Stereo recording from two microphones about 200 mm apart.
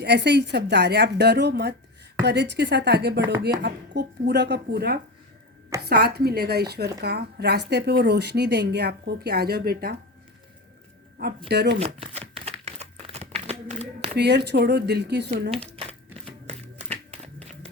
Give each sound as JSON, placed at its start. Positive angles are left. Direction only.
{"t": 0.0, "sound": "a woman's voice", "side_deg": -60}
{"t": 11.4, "sound": "a woman's voice", "side_deg": -55}
{"t": 11.9, "sound": "crumpling", "side_deg": -30}
{"t": 14.2, "sound": "a woman's voice", "side_deg": -55}
{"t": 15.7, "sound": "crumpling", "side_deg": -30}
{"t": 16.2, "sound": "music", "side_deg": -30}